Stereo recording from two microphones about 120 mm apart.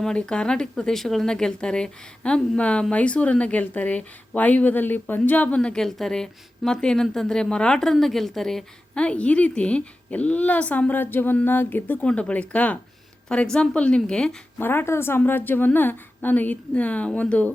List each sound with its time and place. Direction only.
0.0 s a woman's voice: 5° left (ahead or behind)
14.6 s a woman's voice: 20° left (ahead or behind)